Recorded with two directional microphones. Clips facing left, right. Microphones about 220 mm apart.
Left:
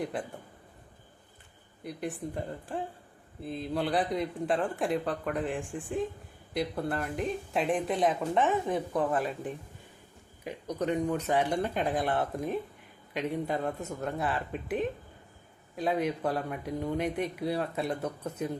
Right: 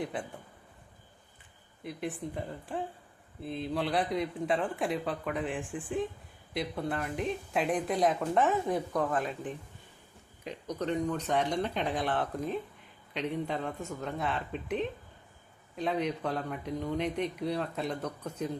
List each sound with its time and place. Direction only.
0.0 s speech: centre (ahead or behind)
1.8 s speech: centre (ahead or behind)
10.8 s speech: 10° left (ahead or behind)